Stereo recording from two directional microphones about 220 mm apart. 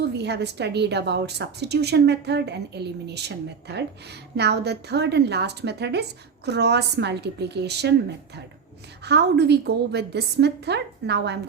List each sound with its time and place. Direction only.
0.2 s a woman's voice: 50° right (ahead or behind)
9.0 s a woman's voice: 50° right (ahead or behind)